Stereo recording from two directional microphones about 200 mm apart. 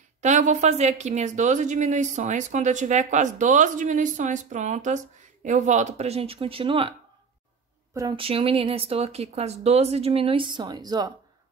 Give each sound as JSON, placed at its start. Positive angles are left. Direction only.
{"t": 0.2, "sound": "speech", "side_deg": -40}
{"t": 7.9, "sound": "a woman's voice", "side_deg": -15}
{"t": 8.2, "sound": "speech", "side_deg": -30}